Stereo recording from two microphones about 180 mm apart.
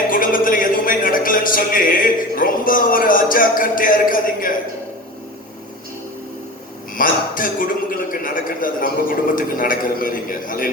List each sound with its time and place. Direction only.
0.1 s speech: 50° left (ahead or behind)
6.9 s a man's voice: 50° left (ahead or behind)